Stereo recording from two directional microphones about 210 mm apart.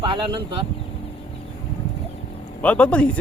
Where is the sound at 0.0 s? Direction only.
20° right (ahead or behind).